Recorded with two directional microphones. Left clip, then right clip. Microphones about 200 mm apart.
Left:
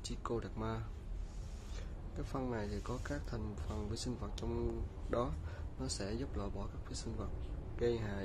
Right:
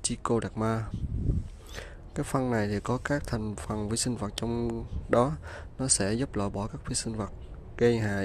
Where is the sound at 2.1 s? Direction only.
45° right (ahead or behind).